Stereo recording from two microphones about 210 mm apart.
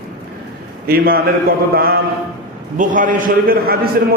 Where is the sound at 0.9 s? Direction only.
45° right (ahead or behind).